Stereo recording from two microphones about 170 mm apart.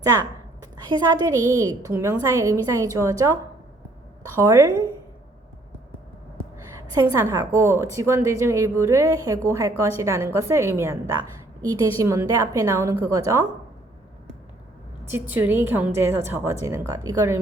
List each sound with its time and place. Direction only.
0.0 s a woman's voice: 20° right (ahead or behind)
4.4 s a woman's voice: 15° right (ahead or behind)
6.9 s a woman's voice: 20° right (ahead or behind)
15.1 s a woman's voice: 10° right (ahead or behind)